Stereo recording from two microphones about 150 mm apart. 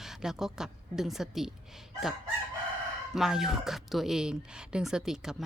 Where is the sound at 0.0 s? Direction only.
5° right (ahead or behind).